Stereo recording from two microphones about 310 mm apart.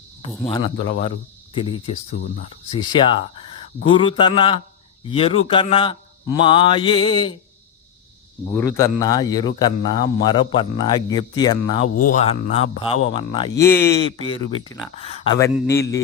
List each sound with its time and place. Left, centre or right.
0.4 s a man's voice: centre
2.7 s a man's voice: centre
8.5 s a man's voice: centre